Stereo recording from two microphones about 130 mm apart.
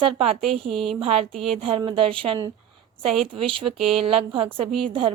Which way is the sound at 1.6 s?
45° right (ahead or behind).